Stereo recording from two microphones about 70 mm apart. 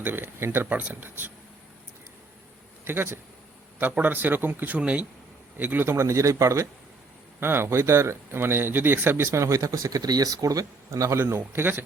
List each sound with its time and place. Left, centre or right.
0.0 s speech: right
0.7 s speech: right
2.8 s speech: right
6.1 s a man's voice: right
7.3 s speech: right
9.6 s speech: right
11.3 s speech: right